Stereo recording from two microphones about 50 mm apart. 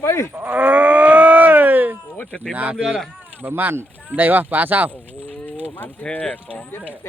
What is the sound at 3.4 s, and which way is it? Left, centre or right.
Speech, right.